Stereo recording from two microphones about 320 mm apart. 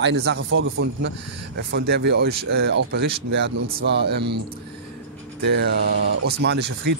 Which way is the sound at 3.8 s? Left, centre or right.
Right.